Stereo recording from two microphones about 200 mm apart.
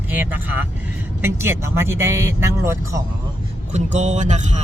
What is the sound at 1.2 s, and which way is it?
Speech, 10° right (ahead or behind).